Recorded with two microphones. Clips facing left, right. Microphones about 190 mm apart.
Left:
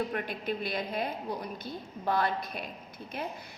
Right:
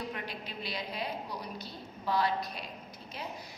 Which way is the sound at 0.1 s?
50° left (ahead or behind).